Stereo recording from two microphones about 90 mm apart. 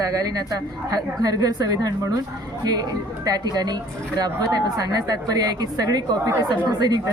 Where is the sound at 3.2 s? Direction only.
50° right (ahead or behind).